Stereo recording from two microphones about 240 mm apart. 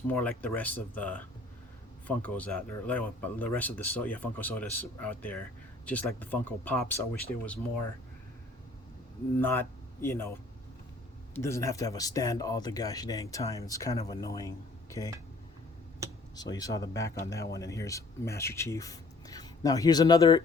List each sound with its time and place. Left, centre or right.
0.1 s speech: centre
9.4 s speech: centre
11.3 s speech: centre
16.3 s speech: centre